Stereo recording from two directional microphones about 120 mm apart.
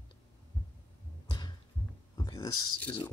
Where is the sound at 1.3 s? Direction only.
35° left (ahead or behind).